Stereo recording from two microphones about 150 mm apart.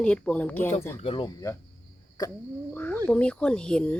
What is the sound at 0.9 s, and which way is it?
Speech, 35° left (ahead or behind).